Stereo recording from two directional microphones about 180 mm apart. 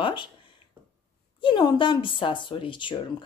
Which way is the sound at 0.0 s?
25° left (ahead or behind).